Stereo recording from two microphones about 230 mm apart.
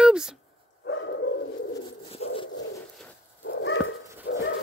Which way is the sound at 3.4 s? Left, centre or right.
Left.